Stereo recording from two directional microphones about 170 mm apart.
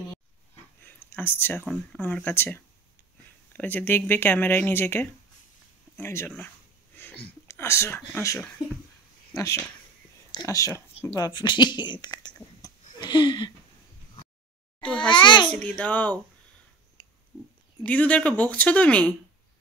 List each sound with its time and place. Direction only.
0.8 s speech: 10° left (ahead or behind)
10.7 s speech: 10° left (ahead or behind)
11.1 s speech: 25° left (ahead or behind)
12.6 s a sound: 25° left (ahead or behind)
14.8 s a child's voice: 5° left (ahead or behind)
15.0 s speech: 25° left (ahead or behind)
15.5 s speech: 5° left (ahead or behind)
17.8 s speech: 10° left (ahead or behind)